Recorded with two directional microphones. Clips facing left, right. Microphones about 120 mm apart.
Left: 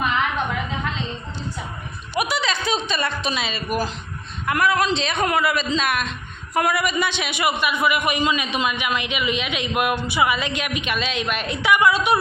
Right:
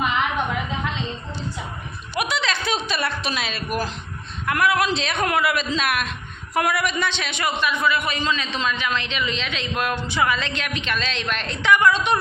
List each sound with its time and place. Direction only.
2.1 s a woman's voice: 5° left (ahead or behind)